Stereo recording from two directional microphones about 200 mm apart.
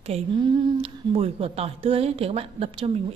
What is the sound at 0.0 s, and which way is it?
A woman's voice, 30° right (ahead or behind).